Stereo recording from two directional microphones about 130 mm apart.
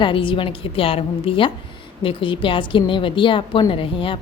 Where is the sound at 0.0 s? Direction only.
40° left (ahead or behind).